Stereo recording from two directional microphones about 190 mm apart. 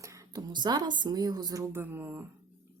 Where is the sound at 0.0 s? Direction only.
15° right (ahead or behind).